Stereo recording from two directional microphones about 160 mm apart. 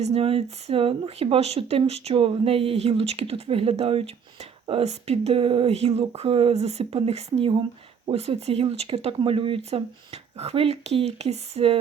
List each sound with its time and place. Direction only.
0.0 s speech: 35° right (ahead or behind)